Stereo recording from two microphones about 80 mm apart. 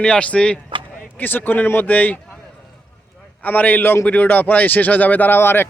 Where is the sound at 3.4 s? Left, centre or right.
Left.